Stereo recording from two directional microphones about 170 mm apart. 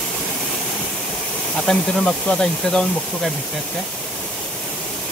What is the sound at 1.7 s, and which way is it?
Speech, 5° left (ahead or behind).